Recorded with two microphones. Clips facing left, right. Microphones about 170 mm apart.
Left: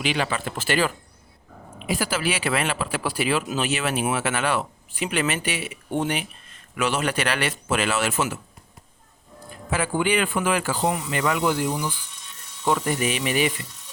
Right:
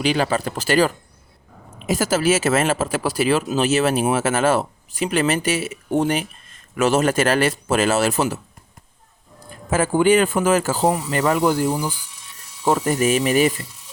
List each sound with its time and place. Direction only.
0.0 s speech: 40° right (ahead or behind)
9.6 s speech: 45° right (ahead or behind)